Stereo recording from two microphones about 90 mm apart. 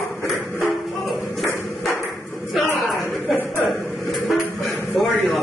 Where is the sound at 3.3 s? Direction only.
25° left (ahead or behind).